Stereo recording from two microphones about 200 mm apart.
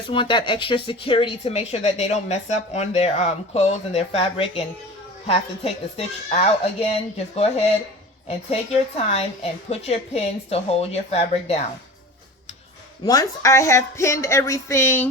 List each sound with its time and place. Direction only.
0.1 s speech: 25° left (ahead or behind)
13.1 s speech: 15° left (ahead or behind)